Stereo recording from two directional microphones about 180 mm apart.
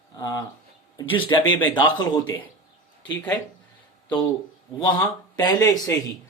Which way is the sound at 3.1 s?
10° left (ahead or behind).